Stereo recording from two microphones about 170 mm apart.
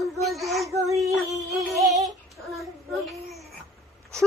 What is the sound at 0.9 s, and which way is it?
Female singing, 20° right (ahead or behind).